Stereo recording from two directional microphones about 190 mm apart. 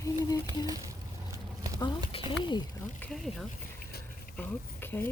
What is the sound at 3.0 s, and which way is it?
Speech, 5° left (ahead or behind).